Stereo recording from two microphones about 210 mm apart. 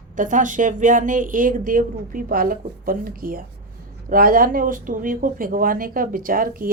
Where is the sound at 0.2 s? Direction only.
40° right (ahead or behind).